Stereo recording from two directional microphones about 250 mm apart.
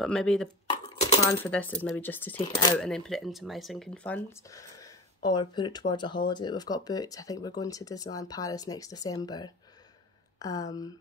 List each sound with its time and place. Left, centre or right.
0.0 s speech: centre
0.7 s a sound: left
1.2 s speech: centre